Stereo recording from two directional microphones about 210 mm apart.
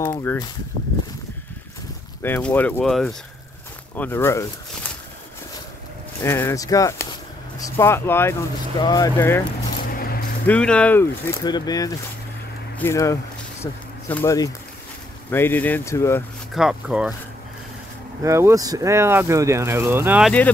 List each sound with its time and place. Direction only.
0.0 s speech: 10° left (ahead or behind)
2.2 s speech: 10° left (ahead or behind)
6.2 s speech: 15° left (ahead or behind)
9.9 s vehicle: 45° left (ahead or behind)
10.4 s speech: 5° left (ahead or behind)
16.5 s speech: 5° right (ahead or behind)
18.2 s speech: 15° right (ahead or behind)